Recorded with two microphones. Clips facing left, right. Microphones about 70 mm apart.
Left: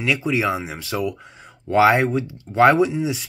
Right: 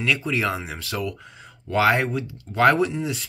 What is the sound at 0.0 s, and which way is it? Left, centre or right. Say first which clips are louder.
Speech: left 3 dB; centre.